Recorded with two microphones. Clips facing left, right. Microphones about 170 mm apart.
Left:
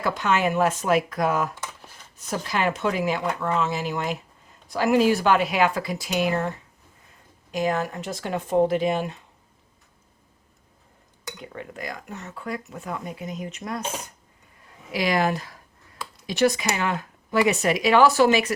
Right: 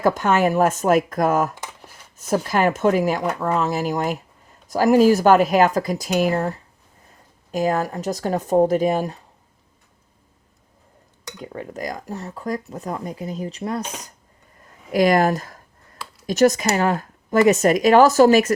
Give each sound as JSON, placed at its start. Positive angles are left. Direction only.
{"t": 0.0, "sound": "speech", "side_deg": -45}
{"t": 11.3, "sound": "speech", "side_deg": -35}
{"t": 14.6, "sound": "a sound", "side_deg": -45}
{"t": 16.2, "sound": "speech", "side_deg": -45}